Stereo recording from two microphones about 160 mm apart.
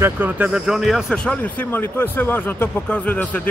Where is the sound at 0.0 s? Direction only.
10° right (ahead or behind).